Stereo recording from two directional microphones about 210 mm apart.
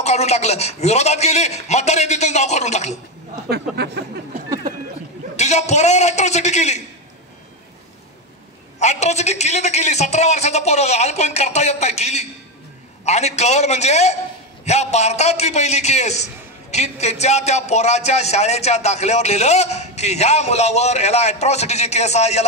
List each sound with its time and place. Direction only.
0.0 s a man's voice: 30° left (ahead or behind)
3.4 s speech: 50° right (ahead or behind)
5.3 s a man's voice: 30° left (ahead or behind)
8.7 s a man's voice: 30° left (ahead or behind)